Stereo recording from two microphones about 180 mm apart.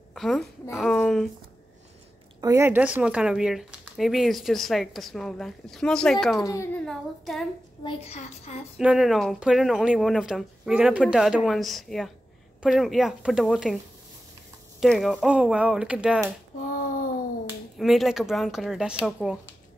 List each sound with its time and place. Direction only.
0.1 s a woman's voice: centre (ahead or behind)
2.4 s speech: 15° right (ahead or behind); by 6.4 s centre (ahead or behind)
6.4 s a child's voice: 15° left (ahead or behind)
7.8 s a child's voice: 35° left (ahead or behind)
8.7 s speech: centre (ahead or behind)
14.8 s speech: centre (ahead or behind)
16.7 s a sound: 50° left (ahead or behind)
17.7 s speech: centre (ahead or behind)